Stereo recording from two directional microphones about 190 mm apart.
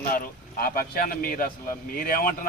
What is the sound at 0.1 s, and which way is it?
Speech, 50° left (ahead or behind).